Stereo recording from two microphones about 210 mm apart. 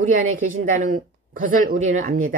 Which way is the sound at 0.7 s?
40° right (ahead or behind).